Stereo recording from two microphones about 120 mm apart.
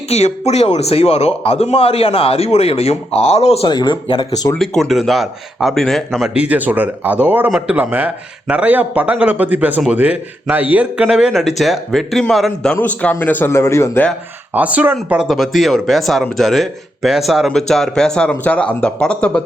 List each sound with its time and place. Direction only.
0.1 s speech: 65° left (ahead or behind)
3.7 s speech: 40° left (ahead or behind)
4.5 s a man's voice: 5° left (ahead or behind)
12.8 s speech: 15° left (ahead or behind)
14.5 s a man's voice: 10° right (ahead or behind); by 19.4 s 10° left (ahead or behind)